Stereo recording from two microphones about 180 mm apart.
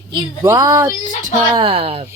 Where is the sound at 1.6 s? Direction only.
35° right (ahead or behind).